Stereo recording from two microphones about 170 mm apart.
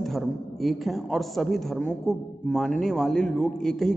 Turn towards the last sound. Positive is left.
turn(degrees=0)  # may be behind; listen again after turning